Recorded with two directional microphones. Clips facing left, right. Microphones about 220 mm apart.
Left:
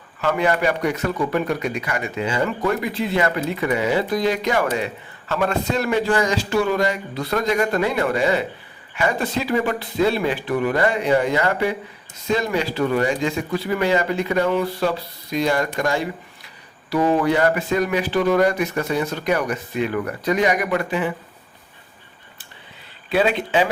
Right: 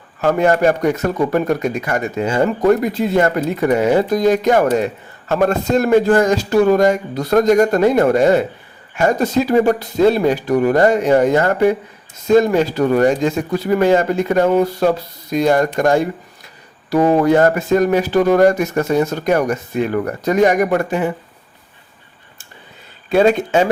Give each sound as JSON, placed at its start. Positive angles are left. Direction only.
{"t": 0.2, "sound": "a man's voice", "side_deg": -45}
{"t": 23.0, "sound": "a man's voice", "side_deg": -45}